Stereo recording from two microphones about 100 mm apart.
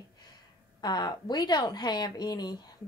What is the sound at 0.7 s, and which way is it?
A woman's voice, 45° left (ahead or behind).